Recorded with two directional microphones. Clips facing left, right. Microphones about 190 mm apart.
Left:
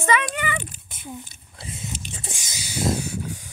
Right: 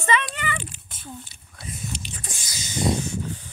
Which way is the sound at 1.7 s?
25° left (ahead or behind).